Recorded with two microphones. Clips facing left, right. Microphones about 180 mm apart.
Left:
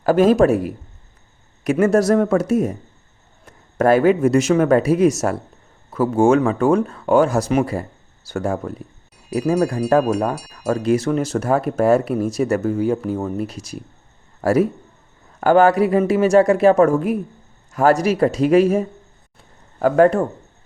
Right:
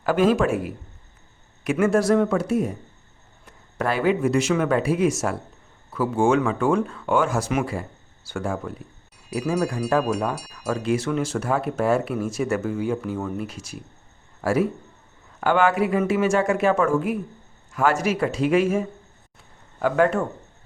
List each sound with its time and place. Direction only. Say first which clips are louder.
0.0 s speech: left 6 dB; 40° left (ahead or behind)
10.8 s speech: left 5 dB; 40° left (ahead or behind)